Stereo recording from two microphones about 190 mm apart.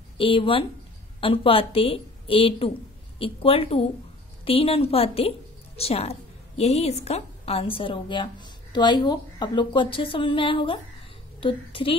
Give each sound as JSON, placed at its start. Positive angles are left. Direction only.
{"t": 0.2, "sound": "a woman's voice", "side_deg": 25}